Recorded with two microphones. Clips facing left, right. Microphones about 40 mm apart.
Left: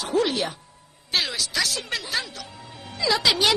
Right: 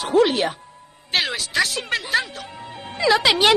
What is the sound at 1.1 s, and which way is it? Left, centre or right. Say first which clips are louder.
Music: right 4 dB; right.